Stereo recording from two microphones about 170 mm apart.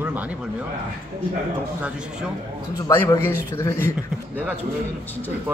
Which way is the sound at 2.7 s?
15° left (ahead or behind).